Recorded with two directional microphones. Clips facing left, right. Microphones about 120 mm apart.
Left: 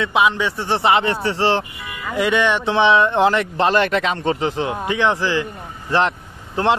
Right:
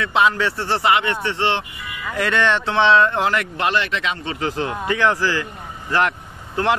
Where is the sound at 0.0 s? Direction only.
20° left (ahead or behind); by 1.7 s 35° left (ahead or behind).